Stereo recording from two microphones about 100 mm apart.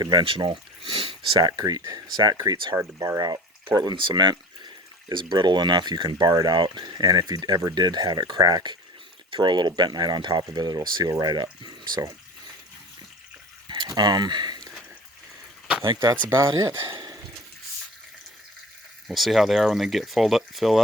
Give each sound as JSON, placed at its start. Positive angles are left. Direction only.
{"t": 0.0, "sound": "speech", "side_deg": -45}
{"t": 0.3, "sound": "speech", "side_deg": -60}
{"t": 2.7, "sound": "speech", "side_deg": -30}
{"t": 13.7, "sound": "speech", "side_deg": -50}
{"t": 15.8, "sound": "speech", "side_deg": -50}
{"t": 16.3, "sound": "speech", "side_deg": -30}
{"t": 19.0, "sound": "speech", "side_deg": 0}